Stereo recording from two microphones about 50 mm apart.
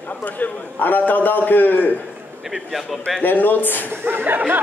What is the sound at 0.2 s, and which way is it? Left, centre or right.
A man's voice, left.